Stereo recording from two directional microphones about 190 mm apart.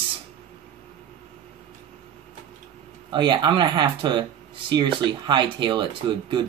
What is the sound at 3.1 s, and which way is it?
Speech, 25° right (ahead or behind).